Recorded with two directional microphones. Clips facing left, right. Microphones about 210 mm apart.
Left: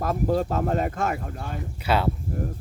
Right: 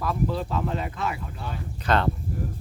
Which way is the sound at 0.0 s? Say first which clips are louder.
Left 4 dB; 45° left (ahead or behind).